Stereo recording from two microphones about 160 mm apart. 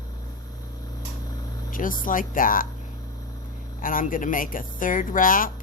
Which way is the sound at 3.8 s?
60° left (ahead or behind).